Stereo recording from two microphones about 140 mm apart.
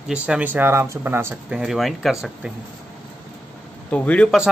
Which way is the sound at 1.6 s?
Centre (ahead or behind).